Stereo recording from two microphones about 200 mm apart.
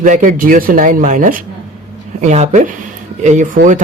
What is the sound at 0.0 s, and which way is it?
Speech, 40° right (ahead or behind).